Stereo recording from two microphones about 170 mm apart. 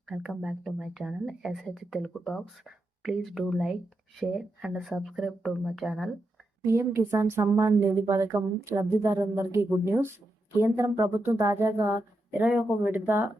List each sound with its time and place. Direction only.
0.1 s speech: 5° right (ahead or behind)
6.6 s speech: 15° right (ahead or behind)